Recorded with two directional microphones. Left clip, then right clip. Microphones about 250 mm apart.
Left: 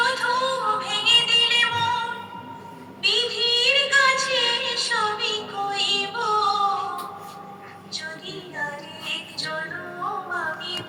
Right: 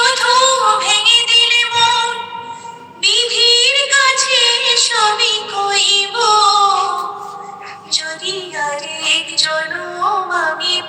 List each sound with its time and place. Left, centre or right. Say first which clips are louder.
0.0 s music: right 10 dB; right